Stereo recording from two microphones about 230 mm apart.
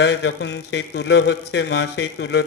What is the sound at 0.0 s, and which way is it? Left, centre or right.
A man's voice, left.